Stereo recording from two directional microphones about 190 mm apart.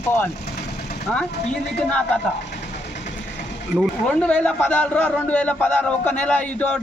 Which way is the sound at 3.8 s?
5° left (ahead or behind).